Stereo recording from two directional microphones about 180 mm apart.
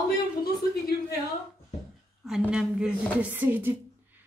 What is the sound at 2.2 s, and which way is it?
A woman's voice, 5° right (ahead or behind).